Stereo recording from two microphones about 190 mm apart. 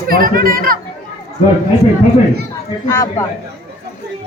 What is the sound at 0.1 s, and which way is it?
Speech, 50° right (ahead or behind).